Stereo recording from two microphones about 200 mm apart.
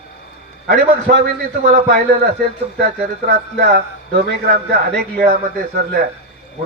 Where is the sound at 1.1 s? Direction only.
45° right (ahead or behind).